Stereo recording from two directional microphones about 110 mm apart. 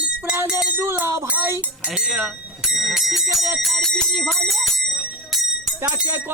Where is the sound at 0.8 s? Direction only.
20° right (ahead or behind).